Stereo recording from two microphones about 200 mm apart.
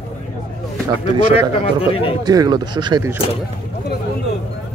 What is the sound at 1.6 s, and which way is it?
Speech, 25° left (ahead or behind).